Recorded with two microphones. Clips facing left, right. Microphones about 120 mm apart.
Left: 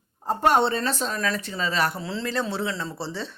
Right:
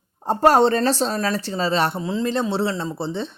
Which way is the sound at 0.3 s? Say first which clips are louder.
Right 5 dB; 35° right (ahead or behind).